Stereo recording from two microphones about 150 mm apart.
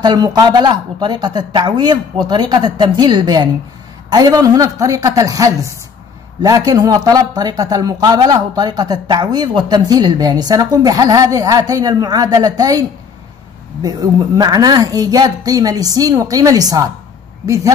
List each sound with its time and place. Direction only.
0.0 s speech: 25° right (ahead or behind)
13.8 s speech: 25° right (ahead or behind)